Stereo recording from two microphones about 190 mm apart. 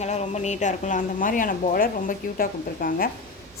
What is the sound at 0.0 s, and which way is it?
A woman's voice, 35° left (ahead or behind).